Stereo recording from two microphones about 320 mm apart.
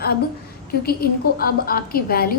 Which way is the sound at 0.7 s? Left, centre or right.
Left.